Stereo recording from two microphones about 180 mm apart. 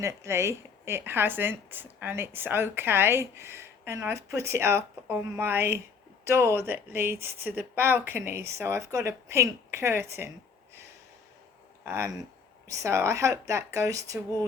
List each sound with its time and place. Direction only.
0.0 s a woman's voice: 15° right (ahead or behind)
11.9 s a woman's voice: 15° right (ahead or behind)